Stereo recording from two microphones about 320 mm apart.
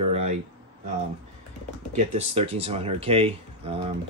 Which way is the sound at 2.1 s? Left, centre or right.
Centre.